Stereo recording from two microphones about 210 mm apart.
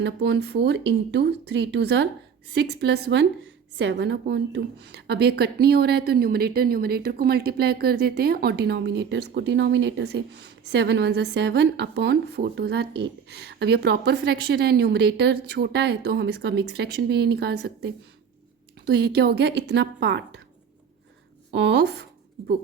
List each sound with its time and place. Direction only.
0.0 s a woman's voice: 55° right (ahead or behind)
21.5 s speech: 55° right (ahead or behind)